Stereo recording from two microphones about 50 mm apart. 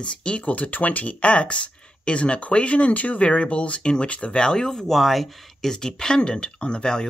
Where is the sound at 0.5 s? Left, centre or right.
Left.